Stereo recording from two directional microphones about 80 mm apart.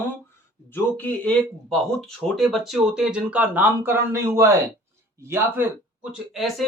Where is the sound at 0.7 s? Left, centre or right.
Left.